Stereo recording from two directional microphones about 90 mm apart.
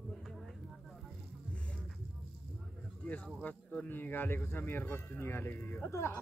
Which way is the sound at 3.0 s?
15° left (ahead or behind).